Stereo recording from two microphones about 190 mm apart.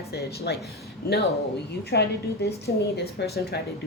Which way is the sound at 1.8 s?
60° left (ahead or behind).